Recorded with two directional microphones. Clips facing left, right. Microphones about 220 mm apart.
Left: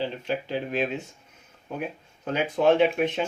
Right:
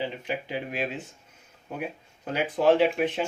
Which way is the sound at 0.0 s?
15° right (ahead or behind).